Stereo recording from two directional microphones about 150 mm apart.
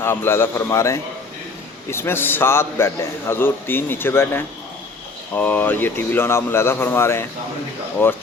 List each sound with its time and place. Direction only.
0.0 s a man's voice: 15° left (ahead or behind)